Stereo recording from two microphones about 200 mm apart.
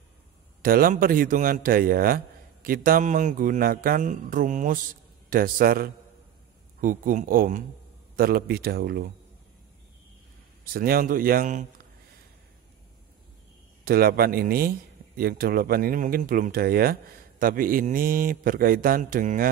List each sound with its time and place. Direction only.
0.6 s speech: 45° right (ahead or behind)
10.6 s speech: 50° right (ahead or behind)
13.8 s speech: 50° right (ahead or behind)